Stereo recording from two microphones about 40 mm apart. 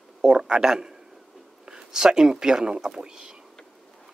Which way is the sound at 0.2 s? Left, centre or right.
Right.